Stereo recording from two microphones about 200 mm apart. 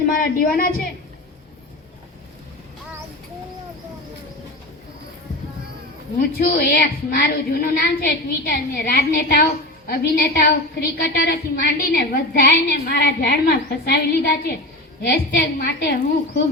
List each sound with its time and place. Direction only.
0.2 s a woman's voice: 45° left (ahead or behind)
6.1 s a woman's voice: 50° left (ahead or behind)